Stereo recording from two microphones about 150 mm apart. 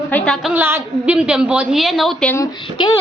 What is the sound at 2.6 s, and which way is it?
Speech, 30° left (ahead or behind).